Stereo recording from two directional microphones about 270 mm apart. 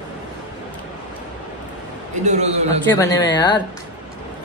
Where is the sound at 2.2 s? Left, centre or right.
Right.